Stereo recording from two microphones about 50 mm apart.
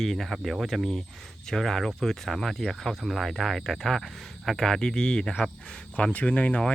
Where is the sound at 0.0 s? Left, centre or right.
Centre.